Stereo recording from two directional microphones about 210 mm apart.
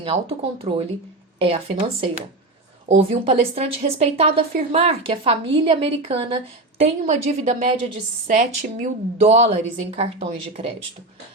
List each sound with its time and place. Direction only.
0.0 s a woman's voice: 25° right (ahead or behind)